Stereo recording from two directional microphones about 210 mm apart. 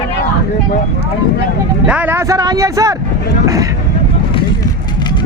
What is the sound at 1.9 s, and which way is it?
Speech, 10° right (ahead or behind).